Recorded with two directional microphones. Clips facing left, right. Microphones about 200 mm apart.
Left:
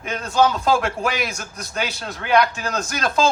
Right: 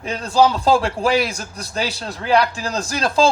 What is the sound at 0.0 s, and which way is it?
A man's voice, 30° right (ahead or behind).